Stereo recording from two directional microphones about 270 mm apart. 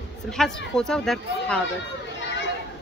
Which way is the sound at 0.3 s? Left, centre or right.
Centre.